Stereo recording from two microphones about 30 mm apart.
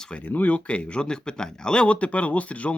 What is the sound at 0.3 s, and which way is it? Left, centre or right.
Speech, left.